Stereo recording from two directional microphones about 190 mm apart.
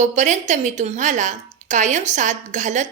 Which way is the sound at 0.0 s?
40° right (ahead or behind).